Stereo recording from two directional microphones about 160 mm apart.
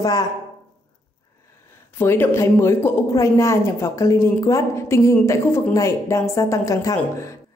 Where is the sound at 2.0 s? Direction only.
15° left (ahead or behind).